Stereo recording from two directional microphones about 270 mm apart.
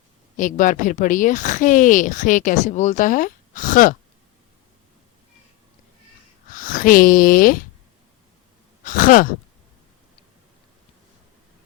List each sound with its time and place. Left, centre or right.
0.3 s speech: left
6.5 s speech: left
8.8 s sigh: left